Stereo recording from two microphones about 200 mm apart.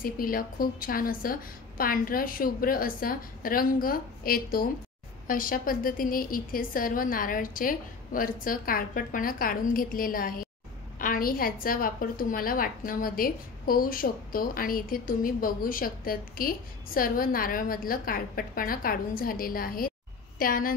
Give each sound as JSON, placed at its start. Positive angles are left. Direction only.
{"t": 0.0, "sound": "a woman's voice", "side_deg": 45}